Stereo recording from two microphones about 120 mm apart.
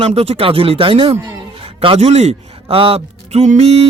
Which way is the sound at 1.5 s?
50° right (ahead or behind).